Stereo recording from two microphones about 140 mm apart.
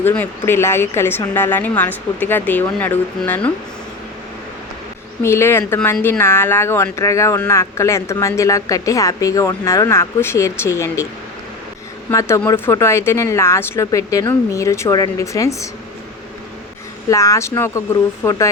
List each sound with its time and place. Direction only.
0.0 s a woman's voice: 15° left (ahead or behind)
5.2 s speech: 20° left (ahead or behind)
12.5 s speech: 15° left (ahead or behind)
17.1 s speech: 20° left (ahead or behind)